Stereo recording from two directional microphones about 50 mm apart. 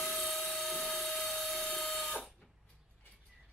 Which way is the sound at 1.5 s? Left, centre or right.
Centre.